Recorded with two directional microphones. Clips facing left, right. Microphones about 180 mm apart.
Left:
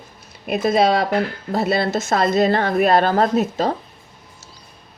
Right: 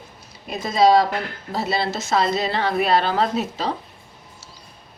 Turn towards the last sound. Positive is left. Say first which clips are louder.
# left 5 dB
turn(degrees=50)  # may be behind; listen again after turning